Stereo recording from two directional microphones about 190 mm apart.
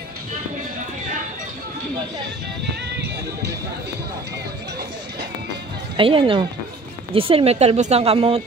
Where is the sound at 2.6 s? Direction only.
60° right (ahead or behind).